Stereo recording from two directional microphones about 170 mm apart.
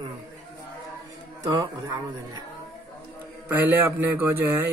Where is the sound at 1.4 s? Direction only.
20° right (ahead or behind).